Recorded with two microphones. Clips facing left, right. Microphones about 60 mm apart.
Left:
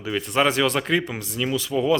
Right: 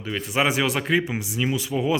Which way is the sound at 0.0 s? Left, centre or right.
Centre.